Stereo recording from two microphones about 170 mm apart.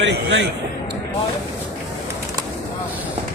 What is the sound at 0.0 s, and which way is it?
Speech, 90° right.